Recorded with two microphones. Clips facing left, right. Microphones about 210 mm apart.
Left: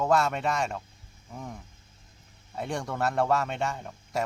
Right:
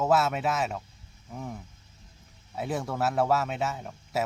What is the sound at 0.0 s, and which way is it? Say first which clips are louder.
Speech: even; 5° right (ahead or behind).